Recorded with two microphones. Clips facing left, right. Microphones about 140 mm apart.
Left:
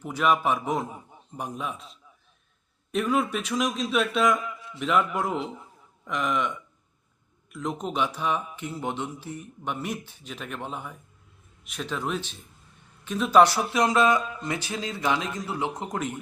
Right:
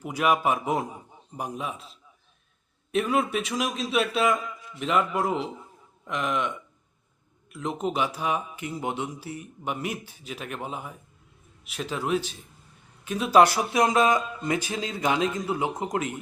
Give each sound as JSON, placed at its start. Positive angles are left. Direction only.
{"t": 0.0, "sound": "a man's voice", "side_deg": -10}